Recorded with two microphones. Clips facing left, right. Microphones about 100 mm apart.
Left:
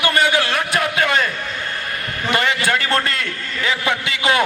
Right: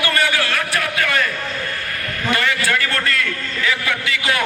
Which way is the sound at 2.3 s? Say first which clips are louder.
Left 1 dB; 20° left (ahead or behind).